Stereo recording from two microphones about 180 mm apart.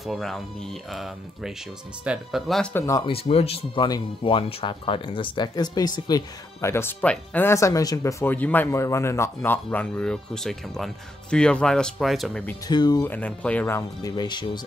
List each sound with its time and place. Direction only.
0.0 s speech: centre (ahead or behind)
3.0 s speech: 30° left (ahead or behind); by 12.4 s centre (ahead or behind)
12.6 s speech: 20° left (ahead or behind)
13.1 s speech: 5° left (ahead or behind); by 14.6 s 25° left (ahead or behind)